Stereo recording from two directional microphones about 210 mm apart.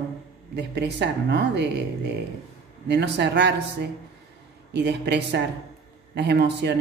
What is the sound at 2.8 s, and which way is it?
Speech, 55° right (ahead or behind).